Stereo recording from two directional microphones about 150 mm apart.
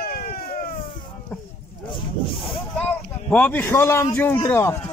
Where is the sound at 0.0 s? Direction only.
80° left.